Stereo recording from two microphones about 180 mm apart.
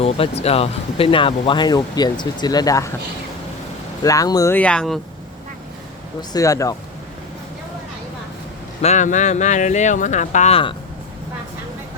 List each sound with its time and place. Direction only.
0.0 s speech: 35° left (ahead or behind); by 2.9 s 20° left (ahead or behind)
4.0 s speech: 20° left (ahead or behind)
6.3 s speech: 20° left (ahead or behind)
8.8 s speech: 40° left (ahead or behind)